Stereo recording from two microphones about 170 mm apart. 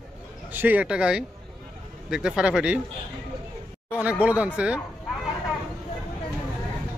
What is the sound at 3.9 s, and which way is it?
Speech, 10° right (ahead or behind).